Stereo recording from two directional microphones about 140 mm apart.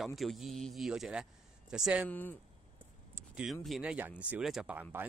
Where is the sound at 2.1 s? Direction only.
15° left (ahead or behind).